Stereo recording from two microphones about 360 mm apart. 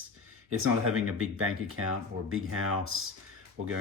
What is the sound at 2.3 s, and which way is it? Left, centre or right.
Speech, right.